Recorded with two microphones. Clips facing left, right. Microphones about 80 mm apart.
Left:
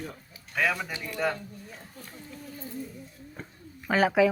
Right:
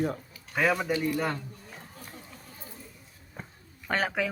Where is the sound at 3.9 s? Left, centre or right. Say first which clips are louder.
Left 7 dB; centre.